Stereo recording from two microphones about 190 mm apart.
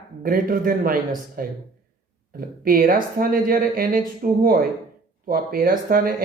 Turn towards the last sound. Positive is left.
turn(degrees=-50)  # may be behind; listen again after turning